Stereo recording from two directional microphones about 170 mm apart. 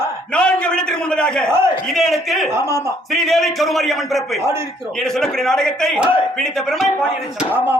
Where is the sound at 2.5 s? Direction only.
15° right (ahead or behind).